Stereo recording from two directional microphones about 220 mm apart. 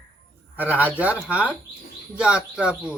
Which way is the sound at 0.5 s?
10° right (ahead or behind).